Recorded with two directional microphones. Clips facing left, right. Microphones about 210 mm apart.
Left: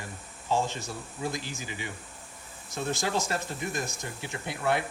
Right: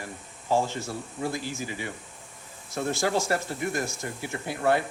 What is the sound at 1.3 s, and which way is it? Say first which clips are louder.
Speech: right 4 dB; 20° left (ahead or behind).